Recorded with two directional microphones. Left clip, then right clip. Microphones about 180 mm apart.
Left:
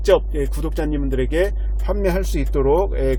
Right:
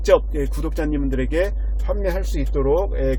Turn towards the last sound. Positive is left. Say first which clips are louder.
# left 2 dB
turn(degrees=25)  # may be behind; listen again after turning